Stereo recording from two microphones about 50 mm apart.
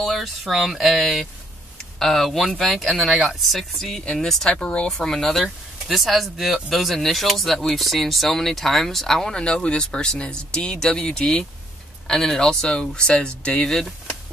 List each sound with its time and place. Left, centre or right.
0.0 s speech: centre
4.0 s speech: centre
9.4 s speech: left
13.7 s speech: centre